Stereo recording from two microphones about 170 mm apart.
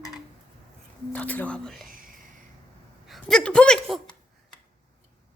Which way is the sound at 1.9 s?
55° right (ahead or behind).